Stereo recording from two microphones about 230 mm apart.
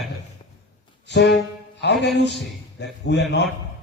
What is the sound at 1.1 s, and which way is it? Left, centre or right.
A man's voice, left.